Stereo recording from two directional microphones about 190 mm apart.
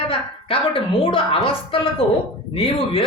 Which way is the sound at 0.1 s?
30° left (ahead or behind).